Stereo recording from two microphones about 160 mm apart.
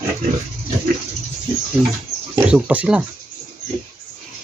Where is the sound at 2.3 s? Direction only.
10° right (ahead or behind).